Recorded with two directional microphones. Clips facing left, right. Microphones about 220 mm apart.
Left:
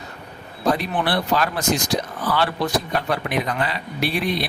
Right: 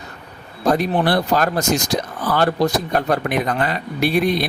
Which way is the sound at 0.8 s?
40° right (ahead or behind).